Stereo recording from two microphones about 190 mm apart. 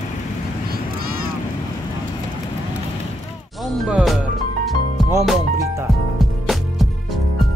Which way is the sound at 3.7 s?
Centre (ahead or behind).